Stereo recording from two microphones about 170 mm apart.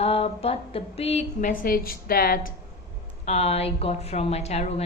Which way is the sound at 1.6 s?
60° left (ahead or behind).